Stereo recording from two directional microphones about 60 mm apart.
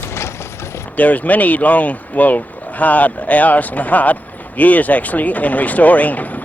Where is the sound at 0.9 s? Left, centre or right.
Left.